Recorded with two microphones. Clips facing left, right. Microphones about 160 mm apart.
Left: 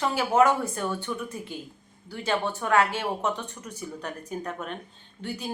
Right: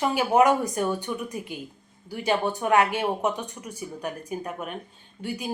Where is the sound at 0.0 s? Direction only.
15° right (ahead or behind).